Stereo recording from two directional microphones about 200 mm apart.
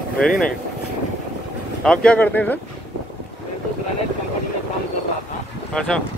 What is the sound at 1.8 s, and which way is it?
Speech, 5° left (ahead or behind).